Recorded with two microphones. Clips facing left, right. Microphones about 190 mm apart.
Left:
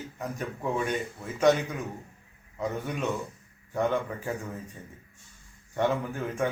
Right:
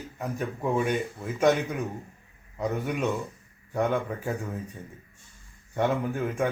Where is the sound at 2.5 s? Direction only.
15° right (ahead or behind).